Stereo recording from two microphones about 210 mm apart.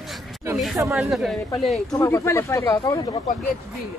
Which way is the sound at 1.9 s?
15° left (ahead or behind).